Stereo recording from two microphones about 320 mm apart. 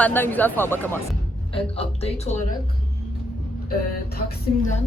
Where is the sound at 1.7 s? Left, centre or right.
Centre.